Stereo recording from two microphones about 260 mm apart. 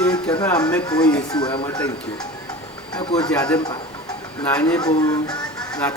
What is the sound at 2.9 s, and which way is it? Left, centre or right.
Speech, centre.